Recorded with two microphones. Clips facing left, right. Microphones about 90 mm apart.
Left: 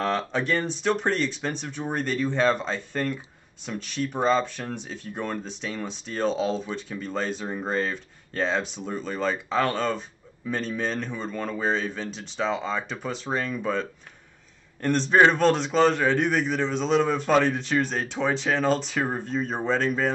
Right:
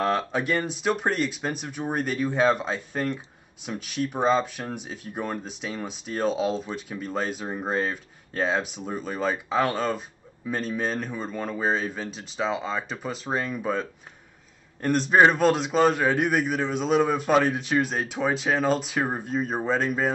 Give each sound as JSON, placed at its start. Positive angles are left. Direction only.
{"t": 0.0, "sound": "speech", "side_deg": -10}